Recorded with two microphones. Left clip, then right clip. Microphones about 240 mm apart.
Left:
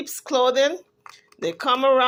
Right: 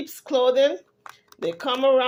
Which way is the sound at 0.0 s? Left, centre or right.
Left.